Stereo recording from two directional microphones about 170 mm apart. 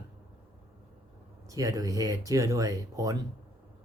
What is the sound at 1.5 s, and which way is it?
Speech, 20° right (ahead or behind).